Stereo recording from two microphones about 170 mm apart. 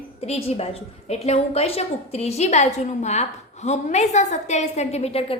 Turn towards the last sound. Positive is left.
turn(degrees=35)  # may be behind; listen again after turning